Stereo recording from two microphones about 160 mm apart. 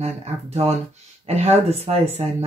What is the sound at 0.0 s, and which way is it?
Speech, 45° right (ahead or behind).